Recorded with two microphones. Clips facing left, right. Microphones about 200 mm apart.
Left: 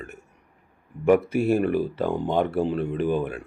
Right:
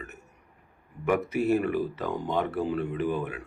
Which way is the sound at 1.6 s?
30° left (ahead or behind).